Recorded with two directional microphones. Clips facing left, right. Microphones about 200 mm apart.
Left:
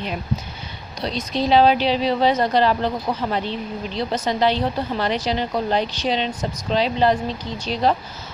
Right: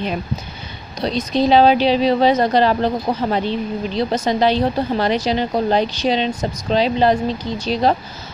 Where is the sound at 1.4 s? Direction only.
15° right (ahead or behind).